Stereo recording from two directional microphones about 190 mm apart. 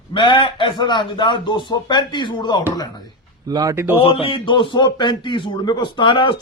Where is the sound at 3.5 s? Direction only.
20° right (ahead or behind).